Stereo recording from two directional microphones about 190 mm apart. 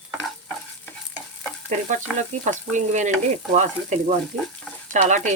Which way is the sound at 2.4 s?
40° right (ahead or behind).